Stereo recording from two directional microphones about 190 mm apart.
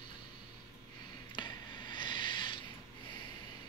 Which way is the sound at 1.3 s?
25° left (ahead or behind).